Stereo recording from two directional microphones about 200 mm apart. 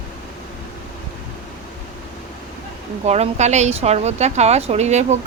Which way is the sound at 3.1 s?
35° right (ahead or behind).